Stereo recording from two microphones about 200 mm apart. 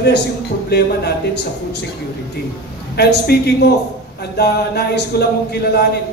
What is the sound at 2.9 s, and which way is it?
Speech, 55° left (ahead or behind).